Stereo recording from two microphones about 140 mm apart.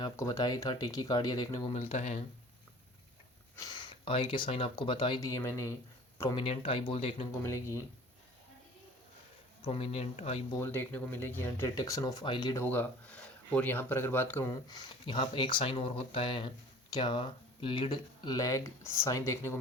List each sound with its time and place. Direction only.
0.0 s speech: 25° left (ahead or behind)
1.7 s speech: 50° left (ahead or behind)
3.5 s speech: 30° left (ahead or behind)
6.3 s speech: 40° left (ahead or behind)
7.3 s speech: 20° left (ahead or behind)
9.6 s speech: 40° left (ahead or behind)
10.6 s speech: 15° left (ahead or behind); by 12.5 s 35° left (ahead or behind)
12.5 s speech: 15° left (ahead or behind)